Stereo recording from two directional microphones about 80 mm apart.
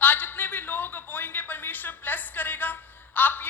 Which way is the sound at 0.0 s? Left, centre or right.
Left.